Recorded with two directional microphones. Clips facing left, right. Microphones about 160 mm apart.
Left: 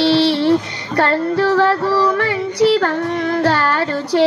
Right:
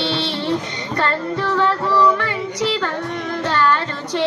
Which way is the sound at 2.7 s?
60° left (ahead or behind).